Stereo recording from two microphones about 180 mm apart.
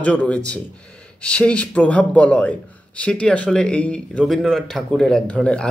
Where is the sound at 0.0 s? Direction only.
5° left (ahead or behind).